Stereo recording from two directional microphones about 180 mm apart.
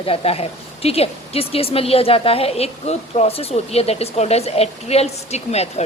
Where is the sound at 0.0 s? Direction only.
30° left (ahead or behind).